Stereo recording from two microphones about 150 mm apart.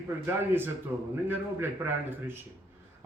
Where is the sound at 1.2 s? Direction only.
15° right (ahead or behind).